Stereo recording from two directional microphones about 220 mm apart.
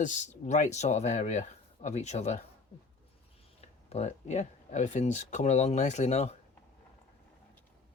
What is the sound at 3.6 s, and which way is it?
Speech, 30° left (ahead or behind).